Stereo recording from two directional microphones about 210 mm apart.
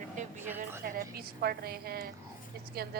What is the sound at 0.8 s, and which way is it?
A woman's voice, 45° right (ahead or behind).